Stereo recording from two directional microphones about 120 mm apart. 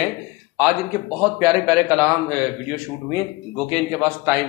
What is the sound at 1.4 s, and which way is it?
Speech, 30° right (ahead or behind).